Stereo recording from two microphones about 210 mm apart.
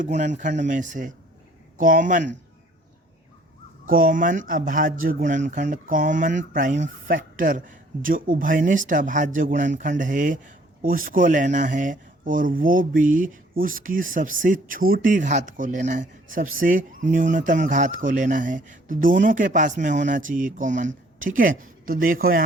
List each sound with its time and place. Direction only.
0.0 s speech: 35° right (ahead or behind)
3.8 s speech: 40° right (ahead or behind)